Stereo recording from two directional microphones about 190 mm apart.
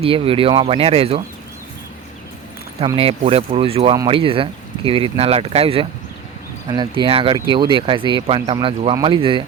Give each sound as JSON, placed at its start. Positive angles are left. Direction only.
{"t": 0.0, "sound": "speech", "side_deg": -30}
{"t": 2.8, "sound": "speech", "side_deg": -30}